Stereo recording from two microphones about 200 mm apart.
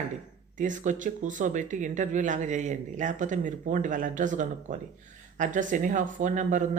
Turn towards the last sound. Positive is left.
turn(degrees=-40)  # may be behind; listen again after turning